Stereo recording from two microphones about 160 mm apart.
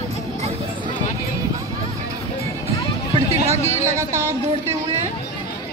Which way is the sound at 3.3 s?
40° right (ahead or behind).